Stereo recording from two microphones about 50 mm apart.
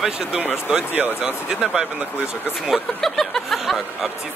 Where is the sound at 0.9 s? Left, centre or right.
Right.